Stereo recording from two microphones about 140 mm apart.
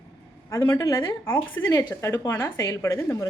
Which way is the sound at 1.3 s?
15° left (ahead or behind).